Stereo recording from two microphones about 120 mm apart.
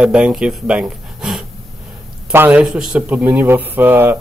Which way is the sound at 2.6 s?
5° right (ahead or behind).